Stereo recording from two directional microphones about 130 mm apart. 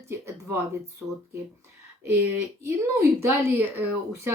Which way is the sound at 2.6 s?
15° right (ahead or behind).